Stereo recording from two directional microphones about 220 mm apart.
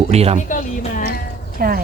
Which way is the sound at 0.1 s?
30° right (ahead or behind).